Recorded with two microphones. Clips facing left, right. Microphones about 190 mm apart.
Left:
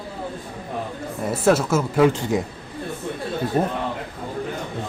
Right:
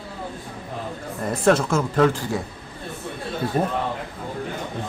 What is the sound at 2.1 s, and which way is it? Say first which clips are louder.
Speech: left 3 dB; 20° left (ahead or behind).